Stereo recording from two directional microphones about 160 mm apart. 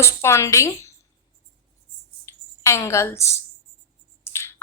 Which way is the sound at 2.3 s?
15° left (ahead or behind).